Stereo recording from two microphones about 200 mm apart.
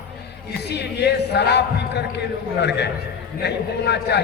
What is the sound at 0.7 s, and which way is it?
A man's voice, 55° left (ahead or behind).